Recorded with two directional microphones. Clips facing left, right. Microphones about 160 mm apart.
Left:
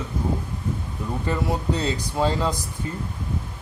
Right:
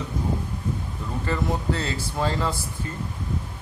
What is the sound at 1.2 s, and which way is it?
Speech, 15° left (ahead or behind).